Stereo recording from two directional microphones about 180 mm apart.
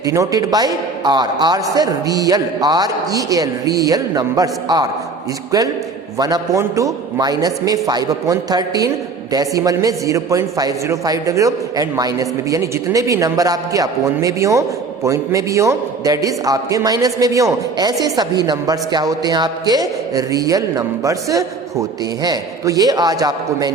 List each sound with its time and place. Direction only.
0.0 s a man's voice: 20° right (ahead or behind)
6.1 s a man's voice: 20° right (ahead or behind)